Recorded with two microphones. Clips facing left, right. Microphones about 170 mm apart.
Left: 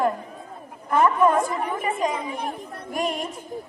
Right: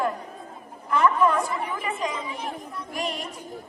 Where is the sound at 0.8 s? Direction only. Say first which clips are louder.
Left 2 dB; 50° left (ahead or behind).